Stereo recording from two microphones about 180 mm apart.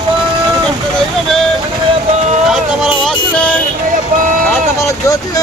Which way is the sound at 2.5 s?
Centre (ahead or behind).